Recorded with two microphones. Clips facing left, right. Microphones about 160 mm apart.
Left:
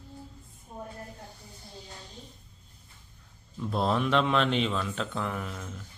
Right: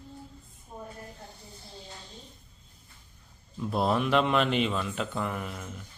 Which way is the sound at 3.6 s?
5° right (ahead or behind).